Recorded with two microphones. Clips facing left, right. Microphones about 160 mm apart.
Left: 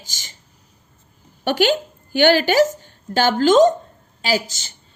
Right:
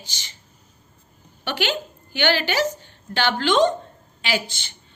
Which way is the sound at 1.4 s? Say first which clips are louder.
Left 8 dB; 45° left (ahead or behind).